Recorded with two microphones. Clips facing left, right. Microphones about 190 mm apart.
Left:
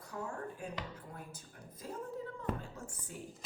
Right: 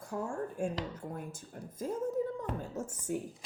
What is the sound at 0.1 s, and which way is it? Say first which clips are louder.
Speech: right 6 dB; 55° right (ahead or behind).